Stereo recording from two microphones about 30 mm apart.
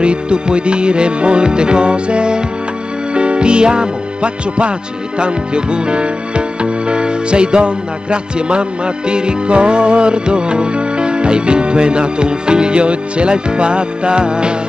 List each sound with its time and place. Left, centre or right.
0.0 s music: right
3.2 s speech: right
5.2 s music: right